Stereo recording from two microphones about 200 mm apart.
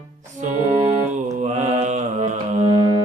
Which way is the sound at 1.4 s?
35° right (ahead or behind).